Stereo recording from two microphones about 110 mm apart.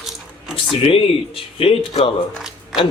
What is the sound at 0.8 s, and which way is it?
Speech, 60° left (ahead or behind).